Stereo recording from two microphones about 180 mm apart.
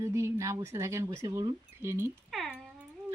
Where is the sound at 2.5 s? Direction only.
5° right (ahead or behind).